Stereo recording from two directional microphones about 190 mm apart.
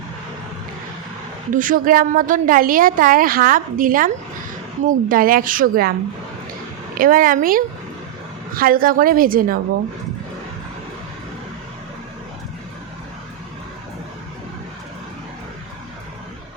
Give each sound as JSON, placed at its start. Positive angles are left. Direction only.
{"t": 1.5, "sound": "a woman's voice", "side_deg": -45}
{"t": 6.9, "sound": "a woman's voice", "side_deg": -45}